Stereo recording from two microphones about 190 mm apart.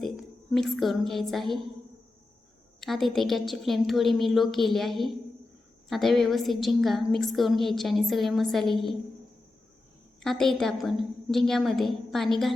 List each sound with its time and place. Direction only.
0.0 s a woman's voice: centre (ahead or behind)
2.8 s a woman's voice: centre (ahead or behind)
10.2 s a woman's voice: centre (ahead or behind)